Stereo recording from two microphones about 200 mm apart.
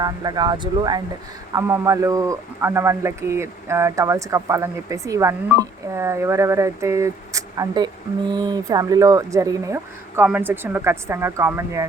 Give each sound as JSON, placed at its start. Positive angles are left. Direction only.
{"t": 0.0, "sound": "speech", "side_deg": -20}